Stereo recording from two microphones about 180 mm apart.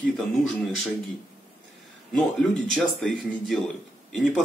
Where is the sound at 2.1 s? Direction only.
Centre (ahead or behind).